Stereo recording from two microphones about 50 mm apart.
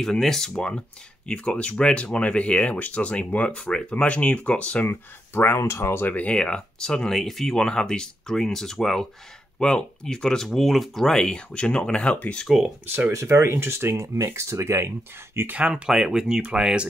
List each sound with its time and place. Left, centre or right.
0.0 s speech: centre
5.6 s speech: left
6.2 s speech: centre
9.6 s speech: centre
12.4 s speech: centre
13.1 s speech: right
15.5 s speech: centre
15.9 s speech: centre